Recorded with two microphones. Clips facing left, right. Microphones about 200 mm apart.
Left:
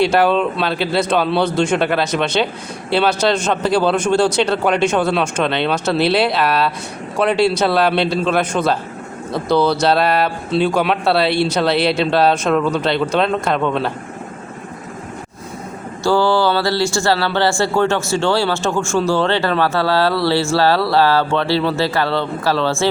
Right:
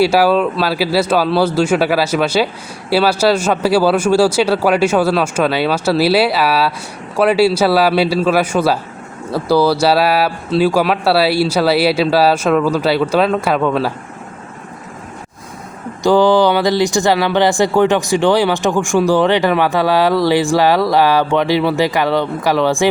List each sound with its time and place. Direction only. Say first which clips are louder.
0.0 s speech: right 2 dB; 5° right (ahead or behind)
16.0 s speech: right 4 dB; 15° right (ahead or behind)